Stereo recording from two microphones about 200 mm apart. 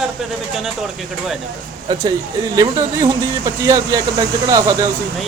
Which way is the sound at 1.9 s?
20° right (ahead or behind).